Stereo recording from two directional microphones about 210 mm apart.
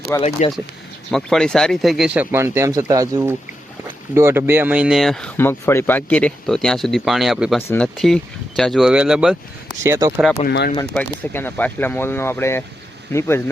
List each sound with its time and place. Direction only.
0.2 s speech: 30° left (ahead or behind)
1.1 s speech: centre (ahead or behind)
9.8 s speech: 15° right (ahead or behind)
10.4 s speech: 50° left (ahead or behind)
10.9 s speech: 10° left (ahead or behind)